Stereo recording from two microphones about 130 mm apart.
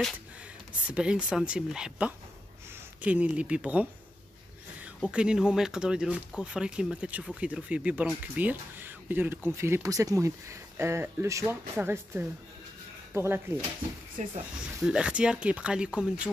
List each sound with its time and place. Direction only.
0.8 s speech: 10° right (ahead or behind)
4.8 s speech: 10° right (ahead or behind)
14.2 s speech: 65° right (ahead or behind)
14.8 s speech: 5° right (ahead or behind)